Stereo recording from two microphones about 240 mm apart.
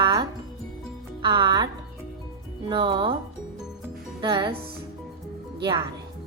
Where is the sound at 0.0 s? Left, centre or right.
Centre.